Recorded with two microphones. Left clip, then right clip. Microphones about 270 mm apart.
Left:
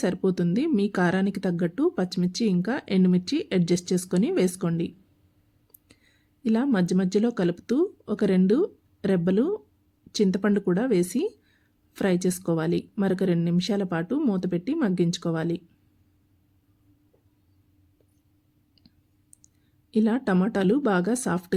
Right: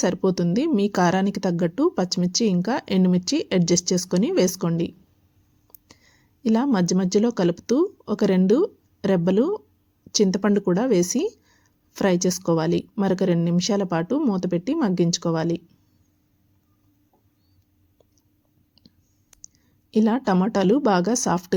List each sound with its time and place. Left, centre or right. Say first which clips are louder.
0.0 s speech: right 4 dB; centre
5.9 s speech: right 5 dB; centre
19.9 s speech: right 4 dB; centre